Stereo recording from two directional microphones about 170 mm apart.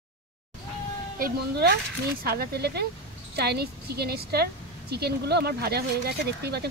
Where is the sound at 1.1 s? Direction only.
65° right (ahead or behind).